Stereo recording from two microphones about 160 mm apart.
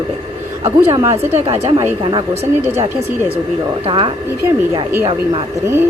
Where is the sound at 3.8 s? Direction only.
30° right (ahead or behind).